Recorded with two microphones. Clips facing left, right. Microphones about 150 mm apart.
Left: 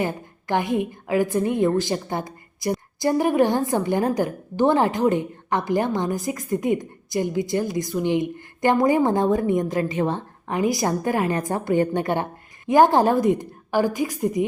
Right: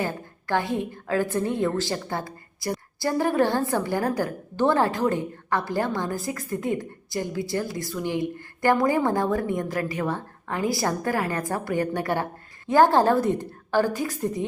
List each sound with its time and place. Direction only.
0.0 s a woman's voice: 20° left (ahead or behind)